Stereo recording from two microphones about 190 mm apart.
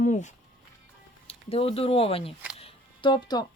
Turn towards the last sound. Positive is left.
turn(degrees=25)  # may be behind; listen again after turning